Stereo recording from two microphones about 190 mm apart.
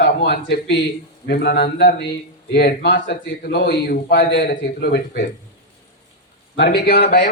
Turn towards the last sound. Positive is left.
turn(degrees=55)  # may be behind; listen again after turning